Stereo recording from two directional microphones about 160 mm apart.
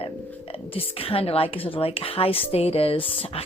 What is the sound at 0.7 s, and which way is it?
Speech, 35° left (ahead or behind).